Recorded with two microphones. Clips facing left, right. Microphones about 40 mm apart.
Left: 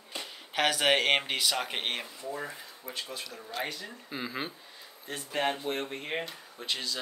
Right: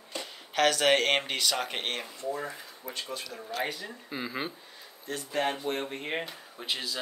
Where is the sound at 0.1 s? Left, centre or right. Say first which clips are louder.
Right 2 dB; centre.